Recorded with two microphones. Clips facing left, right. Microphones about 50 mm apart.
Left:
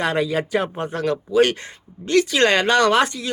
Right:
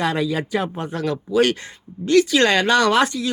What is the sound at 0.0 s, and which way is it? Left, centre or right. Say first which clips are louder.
Speech: left 1 dB; left.